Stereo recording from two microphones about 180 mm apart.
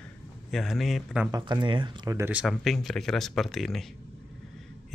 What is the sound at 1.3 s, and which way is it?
Speech, 25° right (ahead or behind).